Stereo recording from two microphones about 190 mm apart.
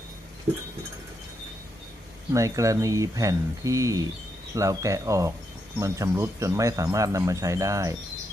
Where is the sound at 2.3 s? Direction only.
15° right (ahead or behind).